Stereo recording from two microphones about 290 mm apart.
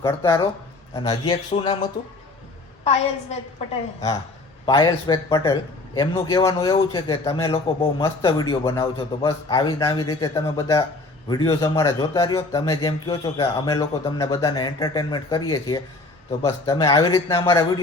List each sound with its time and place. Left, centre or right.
0.0 s a man's voice: centre
2.8 s a woman's voice: left
4.6 s a man's voice: centre